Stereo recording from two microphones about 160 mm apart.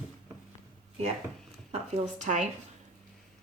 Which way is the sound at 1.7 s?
45° right (ahead or behind).